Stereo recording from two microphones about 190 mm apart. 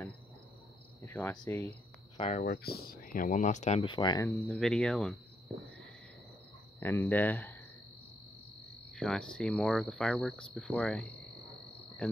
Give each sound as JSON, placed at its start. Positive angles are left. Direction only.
{"t": 1.0, "sound": "cricket", "side_deg": 15}
{"t": 1.4, "sound": "speech", "side_deg": 15}
{"t": 2.1, "sound": "speech", "side_deg": 35}
{"t": 2.4, "sound": "speech", "side_deg": 55}
{"t": 4.3, "sound": "speech", "side_deg": 0}
{"t": 6.8, "sound": "speech", "side_deg": 15}
{"t": 8.9, "sound": "speech", "side_deg": 0}